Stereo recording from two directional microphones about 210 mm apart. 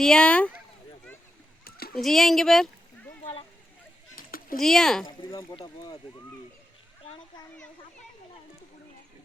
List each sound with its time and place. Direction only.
0.0 s speech: 5° left (ahead or behind)
1.9 s speech: centre (ahead or behind)
4.1 s children playing: 45° left (ahead or behind)
4.6 s speech: centre (ahead or behind)
5.3 s speech: 20° left (ahead or behind)
7.0 s a child's voice: 25° left (ahead or behind)